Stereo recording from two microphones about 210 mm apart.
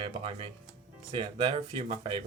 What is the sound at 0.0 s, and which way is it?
Speech, 25° right (ahead or behind).